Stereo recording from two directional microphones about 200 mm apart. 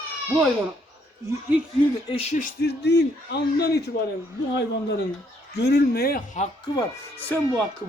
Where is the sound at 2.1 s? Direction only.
30° left (ahead or behind).